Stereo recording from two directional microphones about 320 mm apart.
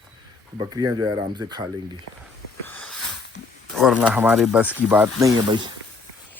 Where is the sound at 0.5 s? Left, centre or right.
Centre.